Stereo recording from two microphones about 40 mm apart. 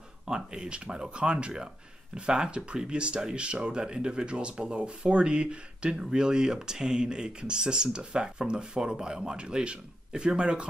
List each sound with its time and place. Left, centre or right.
0.3 s speech: right